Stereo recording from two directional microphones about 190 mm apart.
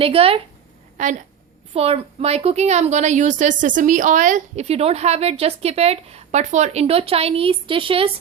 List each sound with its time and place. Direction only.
0.0 s a woman's voice: 30° right (ahead or behind)